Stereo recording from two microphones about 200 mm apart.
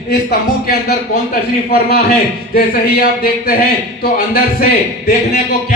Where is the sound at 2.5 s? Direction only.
50° left (ahead or behind).